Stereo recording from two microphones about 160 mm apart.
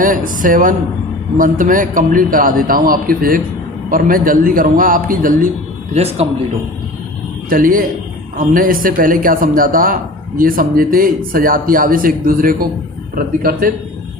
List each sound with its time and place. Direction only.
0.0 s a man's voice: 55° right (ahead or behind)
5.9 s a man's voice: 40° right (ahead or behind)
7.5 s a man's voice: 60° right (ahead or behind)